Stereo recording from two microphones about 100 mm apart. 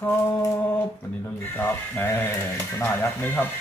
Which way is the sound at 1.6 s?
25° left (ahead or behind).